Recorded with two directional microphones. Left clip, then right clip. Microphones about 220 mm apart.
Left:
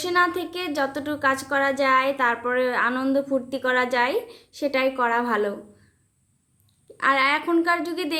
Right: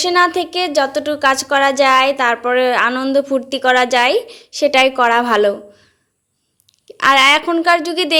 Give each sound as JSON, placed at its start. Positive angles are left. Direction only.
{"t": 0.0, "sound": "a woman's voice", "side_deg": -20}
{"t": 6.8, "sound": "a woman's voice", "side_deg": -25}